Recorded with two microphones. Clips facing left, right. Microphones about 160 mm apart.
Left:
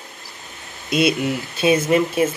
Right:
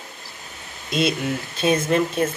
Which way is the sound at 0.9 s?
5° left (ahead or behind).